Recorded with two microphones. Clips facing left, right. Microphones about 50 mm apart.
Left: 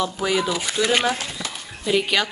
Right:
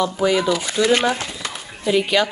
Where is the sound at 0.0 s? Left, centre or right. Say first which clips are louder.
Right 4 dB; centre.